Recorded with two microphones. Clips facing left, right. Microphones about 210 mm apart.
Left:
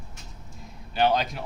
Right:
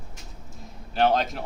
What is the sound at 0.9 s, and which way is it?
Speech, centre (ahead or behind).